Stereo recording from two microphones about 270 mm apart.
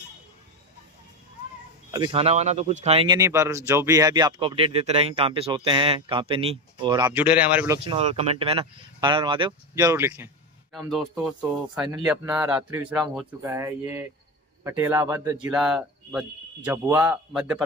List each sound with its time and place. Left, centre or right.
1.9 s speech: centre
7.8 s speech: right; by 17.6 s centre